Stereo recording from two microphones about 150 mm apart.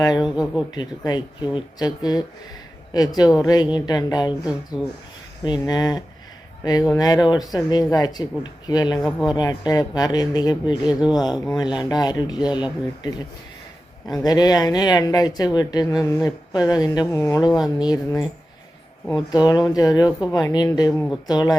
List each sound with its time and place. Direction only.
0.0 s speech: 25° left (ahead or behind)
14.3 s speech: 25° left (ahead or behind)